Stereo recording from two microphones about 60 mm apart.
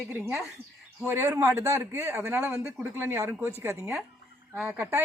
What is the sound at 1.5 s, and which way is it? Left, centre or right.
A man's voice, right.